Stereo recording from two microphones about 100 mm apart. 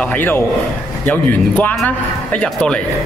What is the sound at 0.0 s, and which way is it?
A man's voice, 15° left (ahead or behind).